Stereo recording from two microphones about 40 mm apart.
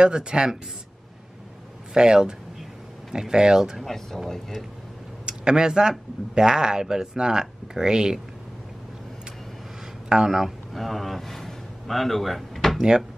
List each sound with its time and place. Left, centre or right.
0.0 s speech: right
2.0 s speech: centre
3.8 s speech: centre
5.2 s speech: centre
10.0 s speech: centre
10.3 s a man's voice: centre